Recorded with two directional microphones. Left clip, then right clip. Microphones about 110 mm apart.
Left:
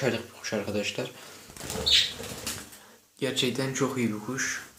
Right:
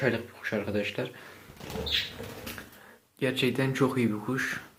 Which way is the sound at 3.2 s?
5° left (ahead or behind).